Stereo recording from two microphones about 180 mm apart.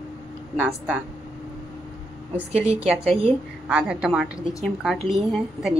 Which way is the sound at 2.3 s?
5° right (ahead or behind).